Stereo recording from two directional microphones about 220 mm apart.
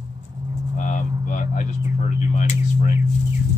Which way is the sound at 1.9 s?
35° left (ahead or behind).